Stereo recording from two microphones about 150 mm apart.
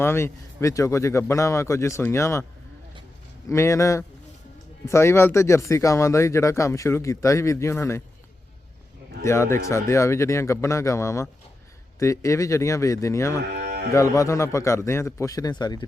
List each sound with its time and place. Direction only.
0.0 s speech: 15° left (ahead or behind)
3.5 s speech: 20° left (ahead or behind)
9.2 s speech: 20° left (ahead or behind)
13.5 s cattle: 90° right
13.9 s speech: 20° left (ahead or behind)